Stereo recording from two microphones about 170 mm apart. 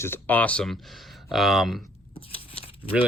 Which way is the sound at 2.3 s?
35° left (ahead or behind).